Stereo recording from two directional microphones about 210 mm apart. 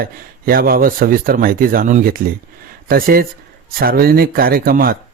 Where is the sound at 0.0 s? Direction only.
45° right (ahead or behind).